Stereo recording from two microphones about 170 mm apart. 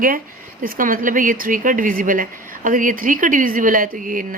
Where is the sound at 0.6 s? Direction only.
55° right (ahead or behind).